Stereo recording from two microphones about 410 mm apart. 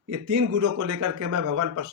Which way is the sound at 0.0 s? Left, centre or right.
Right.